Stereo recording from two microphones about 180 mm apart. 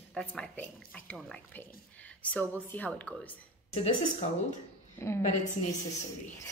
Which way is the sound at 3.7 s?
35° left (ahead or behind).